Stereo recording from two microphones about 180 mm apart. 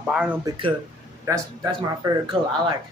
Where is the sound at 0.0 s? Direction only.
5° right (ahead or behind).